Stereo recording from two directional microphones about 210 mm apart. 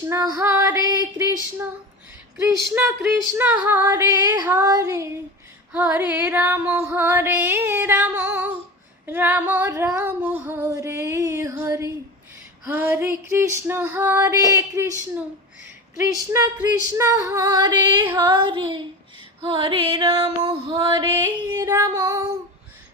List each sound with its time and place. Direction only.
0.0 s female singing: 15° right (ahead or behind)
18.0 s female singing: 10° right (ahead or behind)
18.3 s music: 20° right (ahead or behind)
21.6 s female singing: 15° right (ahead or behind)